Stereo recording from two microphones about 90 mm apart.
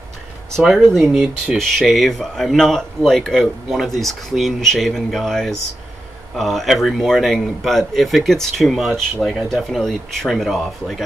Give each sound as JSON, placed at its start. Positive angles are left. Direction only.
{"t": 0.6, "sound": "speech", "side_deg": 0}